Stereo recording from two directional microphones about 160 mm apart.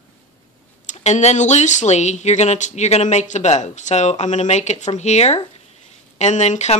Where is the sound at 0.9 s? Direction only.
45° left (ahead or behind).